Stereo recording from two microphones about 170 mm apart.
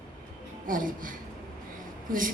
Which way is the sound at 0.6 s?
55° right (ahead or behind).